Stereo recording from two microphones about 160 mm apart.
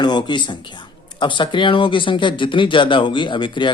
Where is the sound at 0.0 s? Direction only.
25° left (ahead or behind).